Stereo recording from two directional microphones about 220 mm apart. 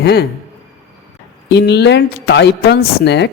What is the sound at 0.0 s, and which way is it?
Speech, 45° left (ahead or behind).